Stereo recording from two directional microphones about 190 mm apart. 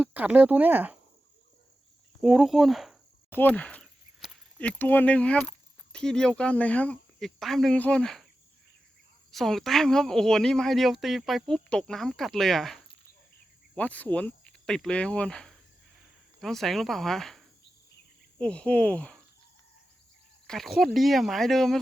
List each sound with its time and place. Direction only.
0.0 s speech: 10° right (ahead or behind)
2.2 s speech: centre (ahead or behind)
9.3 s speech: centre (ahead or behind)
20.5 s speech: centre (ahead or behind)